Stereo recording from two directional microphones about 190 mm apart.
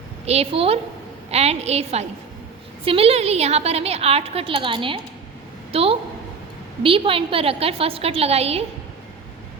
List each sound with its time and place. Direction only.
0.3 s a woman's voice: 30° right (ahead or behind)